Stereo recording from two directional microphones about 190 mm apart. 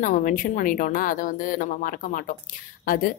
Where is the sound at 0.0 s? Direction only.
45° left (ahead or behind).